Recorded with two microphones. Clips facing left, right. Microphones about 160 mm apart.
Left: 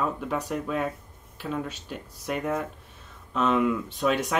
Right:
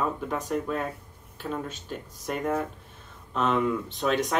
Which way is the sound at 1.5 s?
45° right (ahead or behind).